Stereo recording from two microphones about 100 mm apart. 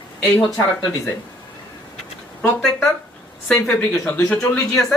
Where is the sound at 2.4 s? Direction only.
15° left (ahead or behind).